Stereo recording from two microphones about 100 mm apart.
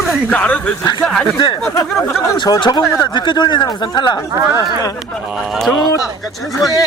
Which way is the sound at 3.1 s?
50° left (ahead or behind).